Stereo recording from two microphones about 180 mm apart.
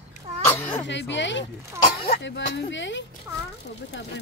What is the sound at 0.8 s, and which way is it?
Speech, 85° left.